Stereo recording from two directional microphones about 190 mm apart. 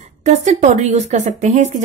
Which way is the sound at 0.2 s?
40° right (ahead or behind).